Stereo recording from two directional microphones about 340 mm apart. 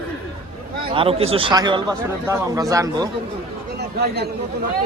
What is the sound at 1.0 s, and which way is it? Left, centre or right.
A man's voice, centre.